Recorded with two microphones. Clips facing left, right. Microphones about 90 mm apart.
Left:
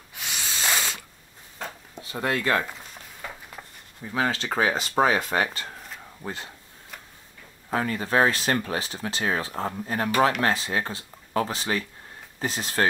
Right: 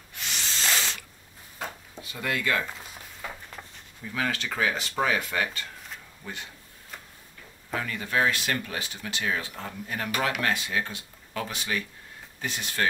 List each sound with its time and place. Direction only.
0.1 s snort: 5° left (ahead or behind)
2.0 s speech: 35° left (ahead or behind)
2.8 s a sound: 5° right (ahead or behind)
4.0 s speech: 30° left (ahead or behind)
7.7 s speech: 40° left (ahead or behind)